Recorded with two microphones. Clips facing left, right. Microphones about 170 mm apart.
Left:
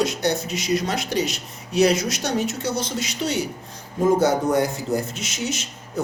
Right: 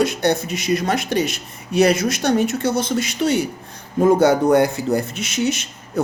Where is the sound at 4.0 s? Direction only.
65° right (ahead or behind).